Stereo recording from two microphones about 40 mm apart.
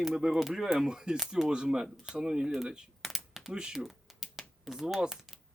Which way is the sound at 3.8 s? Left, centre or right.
Centre.